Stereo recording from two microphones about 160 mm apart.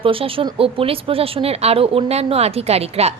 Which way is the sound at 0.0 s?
35° right (ahead or behind).